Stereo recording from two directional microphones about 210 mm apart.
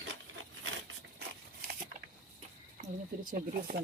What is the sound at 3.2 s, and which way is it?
Speech, 40° right (ahead or behind).